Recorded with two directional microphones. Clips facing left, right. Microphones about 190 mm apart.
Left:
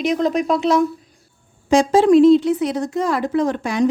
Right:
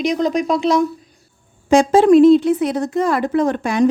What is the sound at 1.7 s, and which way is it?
Speech, 55° right (ahead or behind).